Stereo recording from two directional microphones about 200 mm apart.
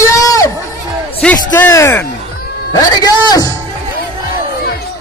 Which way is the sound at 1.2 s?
10° left (ahead or behind).